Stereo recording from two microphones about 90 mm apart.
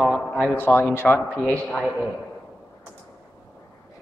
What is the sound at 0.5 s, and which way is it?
Speech, 25° left (ahead or behind).